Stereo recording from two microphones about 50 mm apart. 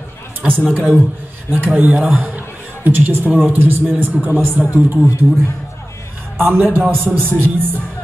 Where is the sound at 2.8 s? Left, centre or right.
Right.